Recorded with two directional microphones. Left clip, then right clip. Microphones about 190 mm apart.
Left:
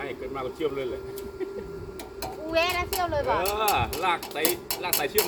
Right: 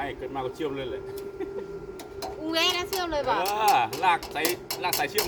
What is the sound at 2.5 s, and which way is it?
Speech, 50° right (ahead or behind).